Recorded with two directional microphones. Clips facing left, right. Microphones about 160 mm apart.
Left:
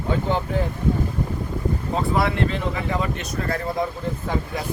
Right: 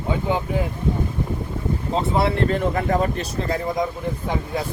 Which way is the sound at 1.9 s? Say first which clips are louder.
Right 2 dB; 30° right (ahead or behind).